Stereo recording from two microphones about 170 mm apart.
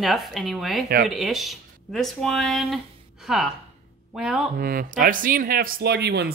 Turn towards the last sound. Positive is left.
turn(degrees=-75)  # may be behind; listen again after turning